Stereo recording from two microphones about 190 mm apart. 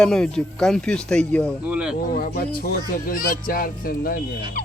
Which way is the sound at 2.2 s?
50° left (ahead or behind).